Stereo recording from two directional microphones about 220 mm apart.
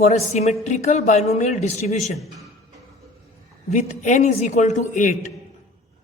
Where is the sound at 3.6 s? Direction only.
35° left (ahead or behind).